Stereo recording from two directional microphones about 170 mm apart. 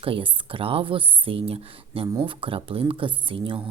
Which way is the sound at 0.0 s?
30° right (ahead or behind).